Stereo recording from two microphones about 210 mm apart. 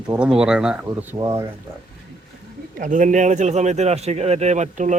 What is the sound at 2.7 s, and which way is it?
Speech, 35° right (ahead or behind).